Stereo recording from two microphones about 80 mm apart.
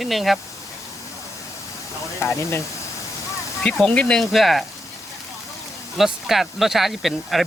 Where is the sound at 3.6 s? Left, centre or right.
Centre.